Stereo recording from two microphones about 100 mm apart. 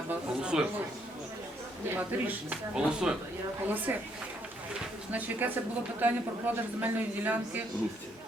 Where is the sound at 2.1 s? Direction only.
20° right (ahead or behind).